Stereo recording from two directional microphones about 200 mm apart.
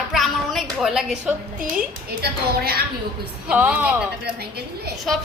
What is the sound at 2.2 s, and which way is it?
Speech, 50° right (ahead or behind).